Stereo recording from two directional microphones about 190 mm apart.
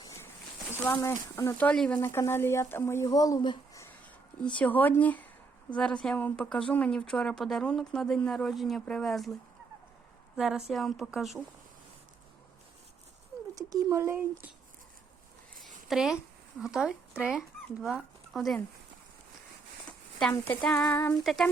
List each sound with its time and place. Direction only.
1.0 s speech: 15° left (ahead or behind)
4.4 s a woman's voice: 5° left (ahead or behind)
10.3 s a woman's voice: centre (ahead or behind)
13.6 s speech: 20° right (ahead or behind)
15.5 s a sound: 45° right (ahead or behind)
15.9 s speech: 5° right (ahead or behind)
20.8 s speech: 10° left (ahead or behind)